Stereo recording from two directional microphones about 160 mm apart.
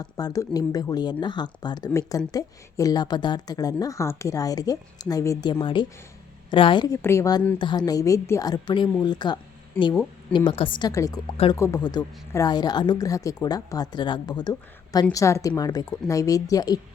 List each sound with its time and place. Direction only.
0.0 s speech: 25° left (ahead or behind)